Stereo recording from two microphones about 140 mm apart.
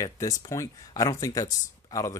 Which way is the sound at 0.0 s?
25° left (ahead or behind).